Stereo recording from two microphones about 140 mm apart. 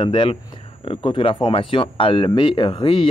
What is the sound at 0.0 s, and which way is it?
Speech, 35° left (ahead or behind).